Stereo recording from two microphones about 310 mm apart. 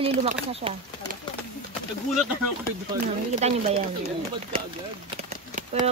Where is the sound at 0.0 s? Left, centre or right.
Centre.